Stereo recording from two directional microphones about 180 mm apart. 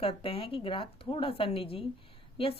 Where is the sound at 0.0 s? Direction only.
30° left (ahead or behind).